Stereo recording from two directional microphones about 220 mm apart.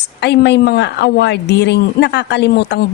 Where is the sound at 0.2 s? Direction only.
50° left (ahead or behind).